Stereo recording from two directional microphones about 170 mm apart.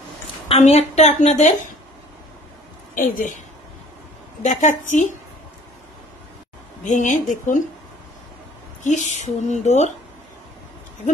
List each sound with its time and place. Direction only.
0.5 s a woman's voice: 40° left (ahead or behind)
2.9 s a woman's voice: 50° left (ahead or behind)
4.4 s a woman's voice: 45° left (ahead or behind)
6.8 s a woman's voice: 45° left (ahead or behind)
8.8 s a woman's voice: 45° left (ahead or behind)